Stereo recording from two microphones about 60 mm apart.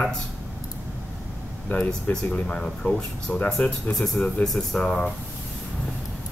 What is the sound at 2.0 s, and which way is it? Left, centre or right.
Speech, left.